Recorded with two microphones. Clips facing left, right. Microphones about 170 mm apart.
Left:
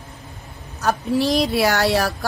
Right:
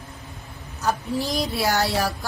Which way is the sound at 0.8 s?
65° left (ahead or behind).